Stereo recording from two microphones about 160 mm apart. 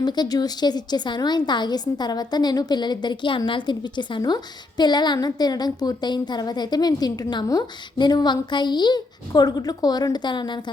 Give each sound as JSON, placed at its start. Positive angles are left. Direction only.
{"t": 0.0, "sound": "a woman's voice", "side_deg": 25}